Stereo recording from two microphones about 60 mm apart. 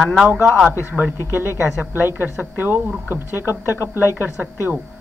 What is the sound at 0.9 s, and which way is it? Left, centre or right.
Speech, centre.